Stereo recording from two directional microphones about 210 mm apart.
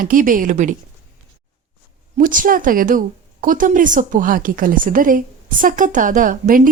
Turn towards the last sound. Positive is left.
turn(degrees=-40)  # may be behind; listen again after turning